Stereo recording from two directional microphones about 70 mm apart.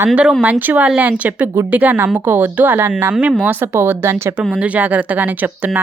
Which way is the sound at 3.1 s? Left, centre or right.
Centre.